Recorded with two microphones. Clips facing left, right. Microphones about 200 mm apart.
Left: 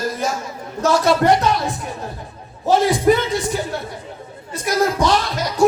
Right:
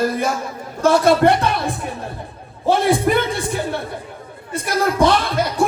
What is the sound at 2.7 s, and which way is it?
Speech, 60° right (ahead or behind).